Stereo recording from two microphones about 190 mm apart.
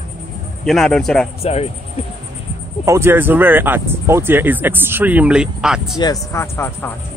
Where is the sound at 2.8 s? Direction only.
15° right (ahead or behind).